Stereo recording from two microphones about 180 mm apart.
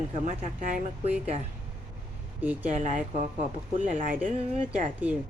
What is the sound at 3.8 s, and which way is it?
Speech, 45° right (ahead or behind).